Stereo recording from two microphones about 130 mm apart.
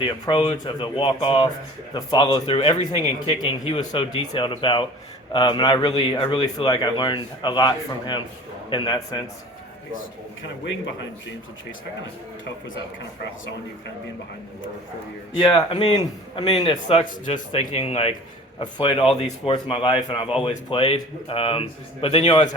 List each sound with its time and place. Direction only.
0.0 s a man's voice: 40° left (ahead or behind)
15.4 s a man's voice: 35° left (ahead or behind)
16.4 s a man's voice: 50° left (ahead or behind)
17.2 s a man's voice: 65° left (ahead or behind); by 22.2 s 45° left (ahead or behind)